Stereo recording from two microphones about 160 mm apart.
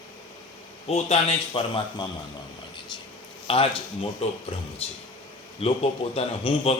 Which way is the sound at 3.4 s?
35° left (ahead or behind).